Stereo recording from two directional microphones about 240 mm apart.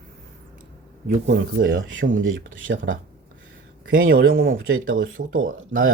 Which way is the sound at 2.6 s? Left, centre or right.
Right.